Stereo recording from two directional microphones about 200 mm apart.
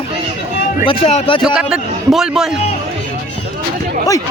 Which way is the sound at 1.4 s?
5° right (ahead or behind).